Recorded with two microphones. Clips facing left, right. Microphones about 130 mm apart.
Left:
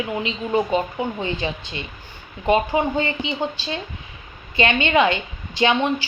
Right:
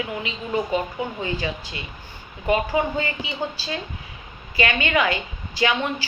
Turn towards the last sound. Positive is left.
turn(degrees=20)  # may be behind; listen again after turning